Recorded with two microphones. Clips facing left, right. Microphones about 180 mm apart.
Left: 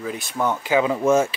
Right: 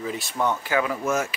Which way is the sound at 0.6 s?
20° left (ahead or behind).